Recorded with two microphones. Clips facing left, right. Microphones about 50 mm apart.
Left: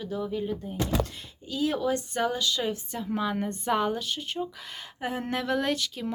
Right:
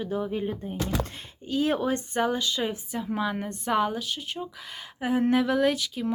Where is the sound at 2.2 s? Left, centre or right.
Right.